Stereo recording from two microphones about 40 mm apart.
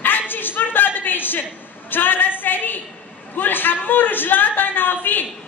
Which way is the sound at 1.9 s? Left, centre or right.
Left.